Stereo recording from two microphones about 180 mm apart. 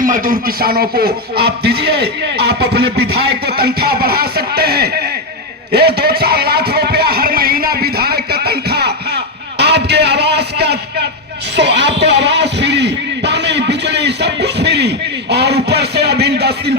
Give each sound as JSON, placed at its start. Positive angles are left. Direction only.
{"t": 0.0, "sound": "speech", "side_deg": -50}
{"t": 5.7, "sound": "a sound", "side_deg": -60}
{"t": 11.5, "sound": "music", "side_deg": -75}